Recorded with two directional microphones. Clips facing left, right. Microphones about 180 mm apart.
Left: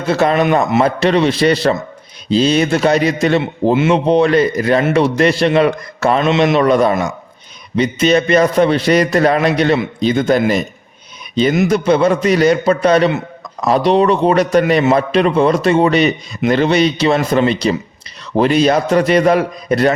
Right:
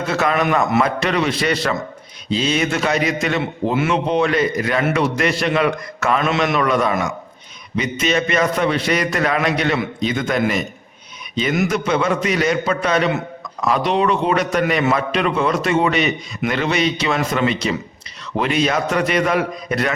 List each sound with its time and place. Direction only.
0.1 s a man's voice: 30° left (ahead or behind)